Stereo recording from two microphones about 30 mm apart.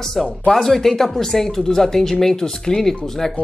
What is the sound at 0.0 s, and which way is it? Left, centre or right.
Speech, centre.